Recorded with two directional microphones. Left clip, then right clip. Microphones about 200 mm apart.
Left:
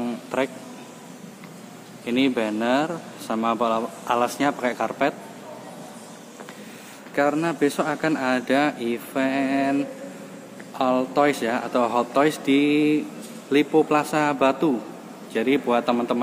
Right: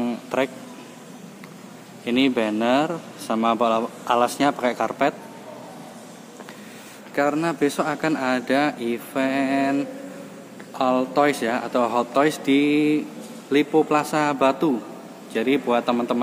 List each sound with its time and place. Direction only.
0.0 s a sound: 15° right (ahead or behind)
2.0 s speech: 15° right (ahead or behind)
7.2 s speech: 5° right (ahead or behind)